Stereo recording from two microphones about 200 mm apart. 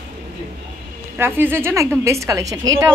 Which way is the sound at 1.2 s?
10° right (ahead or behind).